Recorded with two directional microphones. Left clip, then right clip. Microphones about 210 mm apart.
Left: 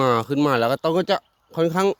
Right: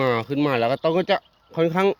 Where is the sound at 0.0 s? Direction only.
25° left (ahead or behind).